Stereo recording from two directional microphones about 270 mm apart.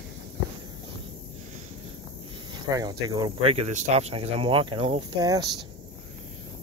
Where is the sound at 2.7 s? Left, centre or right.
Centre.